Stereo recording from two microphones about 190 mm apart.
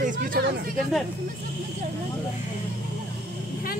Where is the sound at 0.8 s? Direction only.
Centre (ahead or behind).